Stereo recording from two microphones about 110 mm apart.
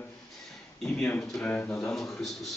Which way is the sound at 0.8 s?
5° left (ahead or behind).